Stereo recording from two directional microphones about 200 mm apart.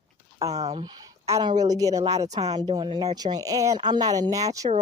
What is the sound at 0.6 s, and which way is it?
Speech, 20° right (ahead or behind).